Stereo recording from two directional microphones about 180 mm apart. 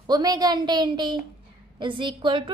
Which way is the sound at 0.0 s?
20° right (ahead or behind).